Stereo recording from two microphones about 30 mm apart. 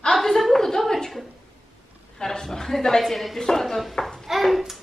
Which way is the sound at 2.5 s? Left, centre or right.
Centre.